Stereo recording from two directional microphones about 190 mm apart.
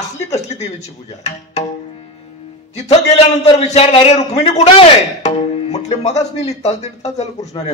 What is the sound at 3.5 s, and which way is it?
Speech, 35° left (ahead or behind).